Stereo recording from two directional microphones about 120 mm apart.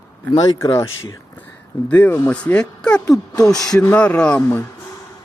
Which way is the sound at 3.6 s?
30° left (ahead or behind).